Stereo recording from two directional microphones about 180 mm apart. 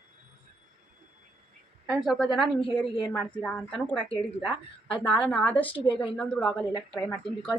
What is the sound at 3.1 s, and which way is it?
Speech, 10° left (ahead or behind).